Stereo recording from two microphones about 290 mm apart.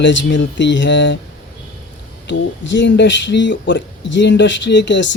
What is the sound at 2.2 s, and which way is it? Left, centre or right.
Speech, left.